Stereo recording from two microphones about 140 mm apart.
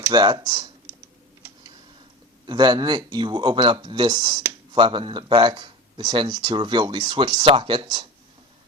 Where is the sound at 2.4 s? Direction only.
30° right (ahead or behind).